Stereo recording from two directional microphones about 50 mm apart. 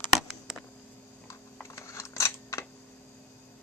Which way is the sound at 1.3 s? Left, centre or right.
Left.